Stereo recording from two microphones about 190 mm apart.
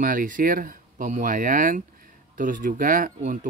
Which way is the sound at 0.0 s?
45° right (ahead or behind).